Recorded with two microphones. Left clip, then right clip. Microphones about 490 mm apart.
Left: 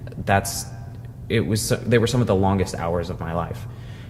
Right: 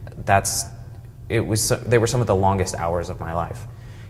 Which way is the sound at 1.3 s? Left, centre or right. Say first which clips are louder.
Right 1 dB; right.